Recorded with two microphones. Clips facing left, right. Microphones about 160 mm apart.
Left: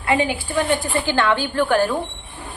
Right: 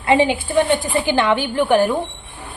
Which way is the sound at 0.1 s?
25° right (ahead or behind).